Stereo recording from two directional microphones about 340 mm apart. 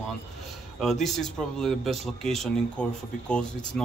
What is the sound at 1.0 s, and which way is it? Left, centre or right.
Speech, centre.